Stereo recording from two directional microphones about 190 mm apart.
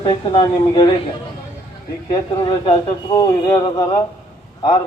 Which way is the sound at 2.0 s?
25° left (ahead or behind).